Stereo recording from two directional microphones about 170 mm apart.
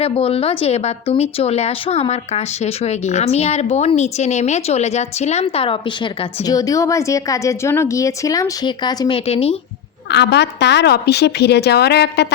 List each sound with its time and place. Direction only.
0.0 s speech: 35° left (ahead or behind)
6.4 s a woman's voice: 20° left (ahead or behind); by 9.6 s 35° left (ahead or behind)
10.1 s a woman's voice: 85° left